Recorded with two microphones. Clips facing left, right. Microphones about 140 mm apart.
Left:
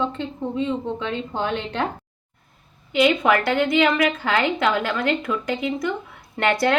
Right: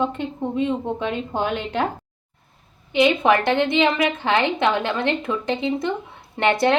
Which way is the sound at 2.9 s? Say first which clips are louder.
Right 1 dB; 20° right (ahead or behind).